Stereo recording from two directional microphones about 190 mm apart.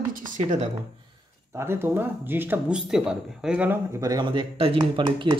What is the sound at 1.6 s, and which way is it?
Speech, 15° right (ahead or behind).